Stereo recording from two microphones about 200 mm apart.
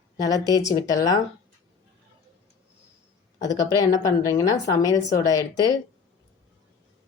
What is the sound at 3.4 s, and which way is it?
A woman's voice, 15° left (ahead or behind).